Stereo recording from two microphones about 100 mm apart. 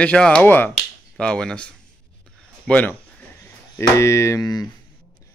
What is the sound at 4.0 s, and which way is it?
Speech, 30° left (ahead or behind).